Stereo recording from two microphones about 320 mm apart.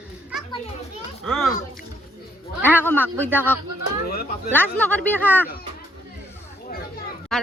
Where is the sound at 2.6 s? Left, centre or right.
Centre.